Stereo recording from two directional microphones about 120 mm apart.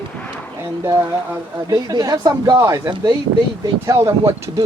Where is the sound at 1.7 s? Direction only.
30° right (ahead or behind).